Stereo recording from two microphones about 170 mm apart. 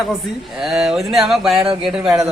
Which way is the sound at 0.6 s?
Centre (ahead or behind).